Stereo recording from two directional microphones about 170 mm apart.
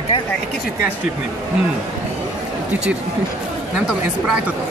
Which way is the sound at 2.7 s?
10° right (ahead or behind).